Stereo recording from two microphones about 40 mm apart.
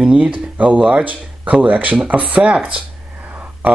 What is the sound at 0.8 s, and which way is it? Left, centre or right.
Speech, right.